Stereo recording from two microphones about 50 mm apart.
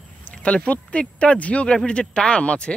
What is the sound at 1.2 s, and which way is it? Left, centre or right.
Speech, left.